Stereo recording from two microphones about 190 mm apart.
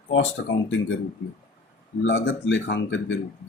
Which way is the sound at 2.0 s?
80° left.